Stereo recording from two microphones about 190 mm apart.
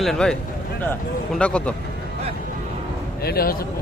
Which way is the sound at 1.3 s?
5° left (ahead or behind).